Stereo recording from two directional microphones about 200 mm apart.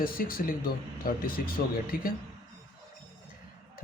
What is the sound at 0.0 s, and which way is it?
Speech, 45° left (ahead or behind).